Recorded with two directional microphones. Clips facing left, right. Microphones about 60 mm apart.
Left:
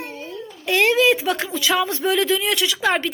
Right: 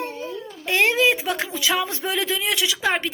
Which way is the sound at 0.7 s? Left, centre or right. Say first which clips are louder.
Left 2 dB; right.